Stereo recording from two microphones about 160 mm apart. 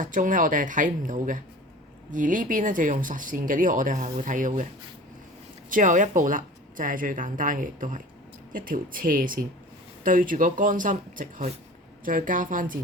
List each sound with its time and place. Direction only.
0.0 s speech: 55° right (ahead or behind)
5.6 s speech: 55° right (ahead or behind)